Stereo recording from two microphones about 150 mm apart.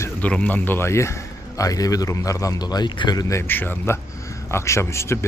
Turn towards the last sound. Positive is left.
turn(degrees=20)  # may be behind; listen again after turning